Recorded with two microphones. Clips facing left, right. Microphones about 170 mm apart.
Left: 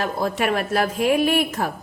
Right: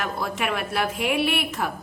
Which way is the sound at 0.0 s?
40° left (ahead or behind).